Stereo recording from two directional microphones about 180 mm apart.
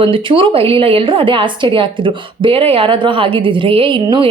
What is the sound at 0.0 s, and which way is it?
Speech, 30° right (ahead or behind).